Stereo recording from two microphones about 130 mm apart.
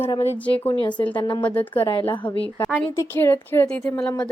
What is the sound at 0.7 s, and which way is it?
Speech, 35° left (ahead or behind).